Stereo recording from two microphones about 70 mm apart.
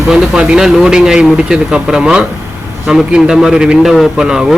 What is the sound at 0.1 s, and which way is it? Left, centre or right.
A man's voice, centre.